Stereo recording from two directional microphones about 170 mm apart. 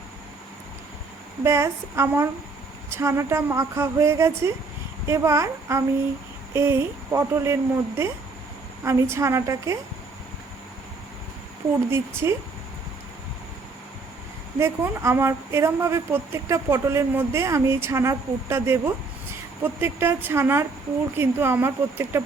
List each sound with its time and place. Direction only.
1.5 s a woman's voice: 15° right (ahead or behind)
11.9 s a woman's voice: 15° right (ahead or behind)
14.6 s a woman's voice: 15° right (ahead or behind)